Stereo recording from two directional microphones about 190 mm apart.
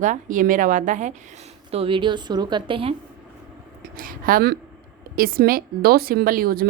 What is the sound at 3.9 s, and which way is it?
A woman's voice, 50° right (ahead or behind).